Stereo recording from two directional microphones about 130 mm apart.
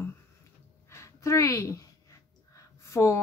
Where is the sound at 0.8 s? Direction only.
20° left (ahead or behind).